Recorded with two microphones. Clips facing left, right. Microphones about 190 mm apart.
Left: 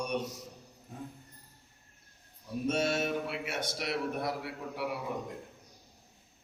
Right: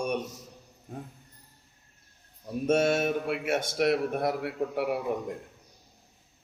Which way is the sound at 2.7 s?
50° right (ahead or behind).